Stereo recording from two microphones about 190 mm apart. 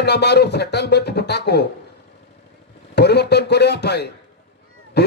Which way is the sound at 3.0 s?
60° left (ahead or behind).